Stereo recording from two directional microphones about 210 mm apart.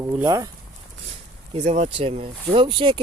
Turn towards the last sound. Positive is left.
turn(degrees=-25)  # may be behind; listen again after turning